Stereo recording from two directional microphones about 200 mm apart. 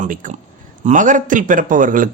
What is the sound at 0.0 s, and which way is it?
A man's voice, 40° right (ahead or behind).